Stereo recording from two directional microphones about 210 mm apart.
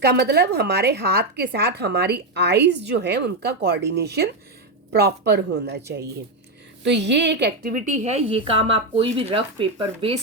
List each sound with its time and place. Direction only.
0.0 s a woman's voice: 50° right (ahead or behind)
6.8 s a woman's voice: 55° right (ahead or behind); by 10.2 s 25° right (ahead or behind)